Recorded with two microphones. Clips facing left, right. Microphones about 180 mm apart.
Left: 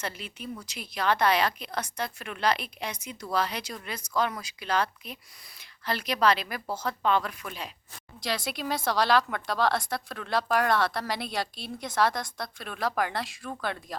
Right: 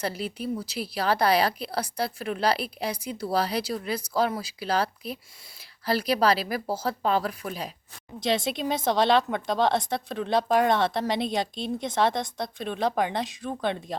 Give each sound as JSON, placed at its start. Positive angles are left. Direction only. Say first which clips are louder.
{"t": 0.0, "sound": "speech", "louder": "right 7 dB", "side_deg": -35}
{"t": 8.2, "sound": "a woman's voice", "louder": "right 6 dB", "side_deg": -25}